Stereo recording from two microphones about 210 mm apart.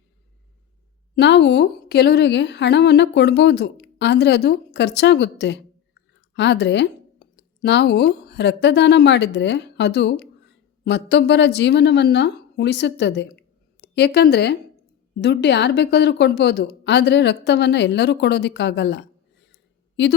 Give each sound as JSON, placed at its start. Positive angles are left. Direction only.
{"t": 1.1, "sound": "a woman's voice", "side_deg": 55}